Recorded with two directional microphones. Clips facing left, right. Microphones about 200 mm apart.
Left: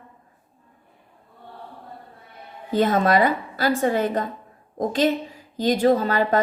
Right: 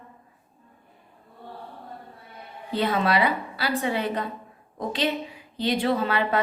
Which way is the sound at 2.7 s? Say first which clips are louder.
Left 5 dB; 45° left (ahead or behind).